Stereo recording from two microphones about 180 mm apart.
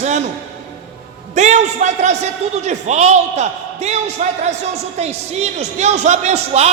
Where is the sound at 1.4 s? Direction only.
40° right (ahead or behind).